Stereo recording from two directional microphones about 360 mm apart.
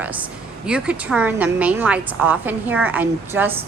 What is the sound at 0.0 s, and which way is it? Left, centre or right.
A woman's voice, centre.